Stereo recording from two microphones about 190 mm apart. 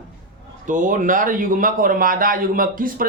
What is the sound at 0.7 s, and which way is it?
A man's voice, 45° right (ahead or behind).